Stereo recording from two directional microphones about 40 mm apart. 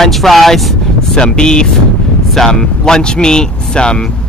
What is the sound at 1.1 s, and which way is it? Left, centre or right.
Speech, left.